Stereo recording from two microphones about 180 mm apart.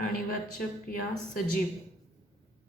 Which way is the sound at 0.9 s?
50° left (ahead or behind).